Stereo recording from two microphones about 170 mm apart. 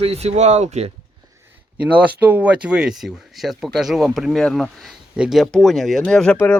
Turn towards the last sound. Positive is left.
turn(degrees=5)  # may be behind; listen again after turning